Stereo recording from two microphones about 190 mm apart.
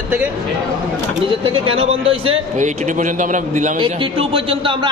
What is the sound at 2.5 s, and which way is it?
A man's voice, 40° right (ahead or behind).